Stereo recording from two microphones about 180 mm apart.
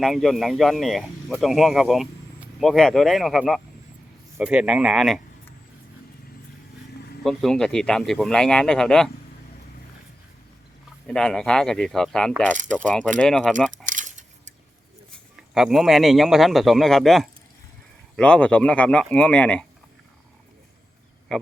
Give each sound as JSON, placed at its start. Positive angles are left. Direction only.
{"t": 0.0, "sound": "speech", "side_deg": 0}
{"t": 7.3, "sound": "speech", "side_deg": 0}
{"t": 11.0, "sound": "speech", "side_deg": 5}
{"t": 13.8, "sound": "a sound", "side_deg": -45}
{"t": 15.5, "sound": "speech", "side_deg": 0}